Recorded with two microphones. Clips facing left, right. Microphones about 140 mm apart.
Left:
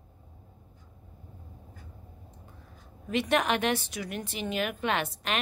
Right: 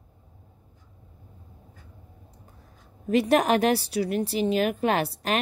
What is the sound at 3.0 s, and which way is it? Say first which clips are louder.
A woman's voice: right 6 dB; 35° right (ahead or behind).